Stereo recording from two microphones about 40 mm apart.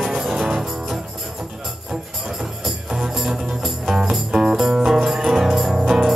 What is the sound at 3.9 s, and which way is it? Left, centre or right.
Music, centre.